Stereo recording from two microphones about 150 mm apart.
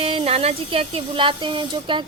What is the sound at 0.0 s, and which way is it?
A woman's voice, 40° right (ahead or behind).